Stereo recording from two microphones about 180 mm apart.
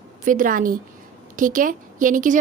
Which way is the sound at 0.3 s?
50° right (ahead or behind).